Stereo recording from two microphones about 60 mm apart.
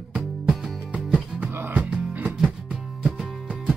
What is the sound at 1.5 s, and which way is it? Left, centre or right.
Music, right.